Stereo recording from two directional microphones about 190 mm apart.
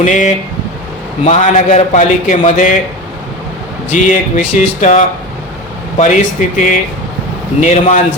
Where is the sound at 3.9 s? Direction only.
40° left (ahead or behind).